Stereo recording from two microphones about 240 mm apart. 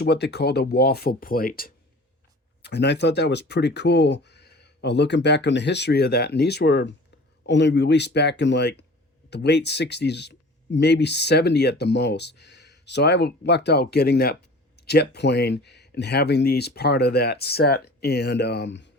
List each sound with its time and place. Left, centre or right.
0.0 s speech: left